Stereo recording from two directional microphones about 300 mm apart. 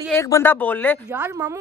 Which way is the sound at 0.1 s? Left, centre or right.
Centre.